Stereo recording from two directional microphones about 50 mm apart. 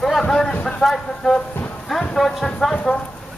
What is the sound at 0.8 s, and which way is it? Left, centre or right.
Speech, centre.